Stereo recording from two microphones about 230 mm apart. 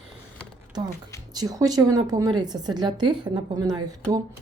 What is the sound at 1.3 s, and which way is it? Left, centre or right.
A woman's voice, centre.